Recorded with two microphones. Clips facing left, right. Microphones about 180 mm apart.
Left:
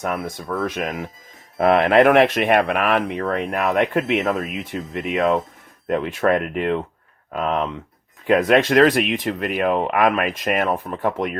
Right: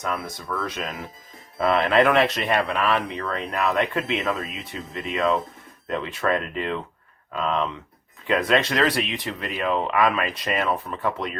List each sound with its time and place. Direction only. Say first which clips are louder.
0.0 s speech: left 4 dB; 55° left (ahead or behind)